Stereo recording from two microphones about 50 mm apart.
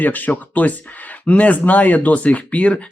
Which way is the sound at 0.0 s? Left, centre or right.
Left.